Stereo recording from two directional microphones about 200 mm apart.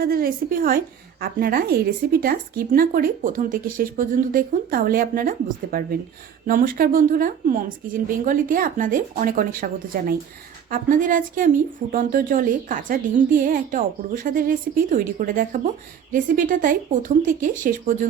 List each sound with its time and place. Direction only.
0.0 s a woman's voice: 50° right (ahead or behind)